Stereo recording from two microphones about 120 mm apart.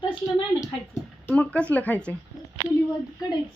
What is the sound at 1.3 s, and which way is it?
Speech, 10° left (ahead or behind).